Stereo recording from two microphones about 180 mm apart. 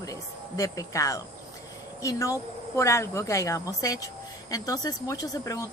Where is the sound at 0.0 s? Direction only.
20° left (ahead or behind).